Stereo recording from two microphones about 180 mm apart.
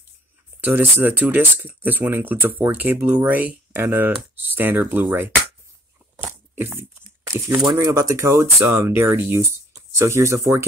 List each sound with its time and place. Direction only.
0.6 s speech: 10° right (ahead or behind)
6.1 s a sound: 10° right (ahead or behind)
7.3 s speech: 15° right (ahead or behind)